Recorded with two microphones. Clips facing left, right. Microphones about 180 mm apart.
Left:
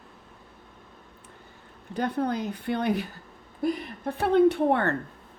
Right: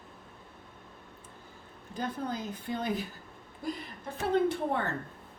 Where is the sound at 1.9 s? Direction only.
65° left (ahead or behind).